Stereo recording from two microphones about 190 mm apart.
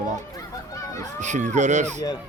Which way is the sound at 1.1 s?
40° right (ahead or behind).